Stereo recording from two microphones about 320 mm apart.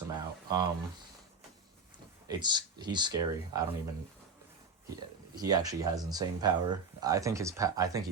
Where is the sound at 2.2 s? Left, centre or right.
Centre.